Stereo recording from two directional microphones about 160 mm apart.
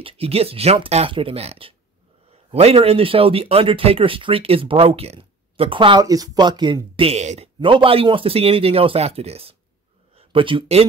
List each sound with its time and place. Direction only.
0.0 s speech: 40° right (ahead or behind)
7.0 s speech: 40° right (ahead or behind)